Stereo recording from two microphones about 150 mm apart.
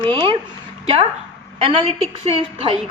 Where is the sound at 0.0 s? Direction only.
35° right (ahead or behind).